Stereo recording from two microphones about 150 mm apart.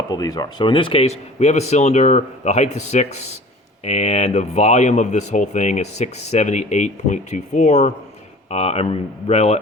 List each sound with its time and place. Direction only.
0.1 s speech: 25° left (ahead or behind); by 9.6 s 45° left (ahead or behind)